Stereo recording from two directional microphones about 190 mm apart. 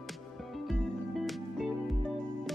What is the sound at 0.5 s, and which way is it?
Music, 5° left (ahead or behind).